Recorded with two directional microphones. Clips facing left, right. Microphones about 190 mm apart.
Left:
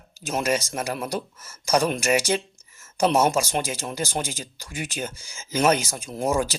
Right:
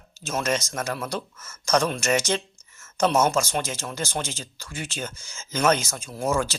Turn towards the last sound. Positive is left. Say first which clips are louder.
# left 1 dB
turn(degrees=15)  # may be behind; listen again after turning